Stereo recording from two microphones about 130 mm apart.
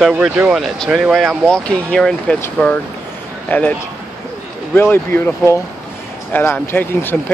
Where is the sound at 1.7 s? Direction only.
10° left (ahead or behind).